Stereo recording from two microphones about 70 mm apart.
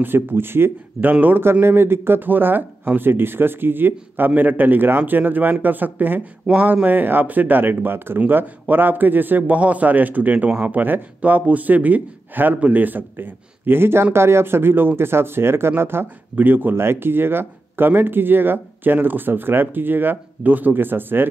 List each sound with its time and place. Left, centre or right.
0.0 s a man's voice: right
6.4 s speech: centre
6.7 s a man's voice: right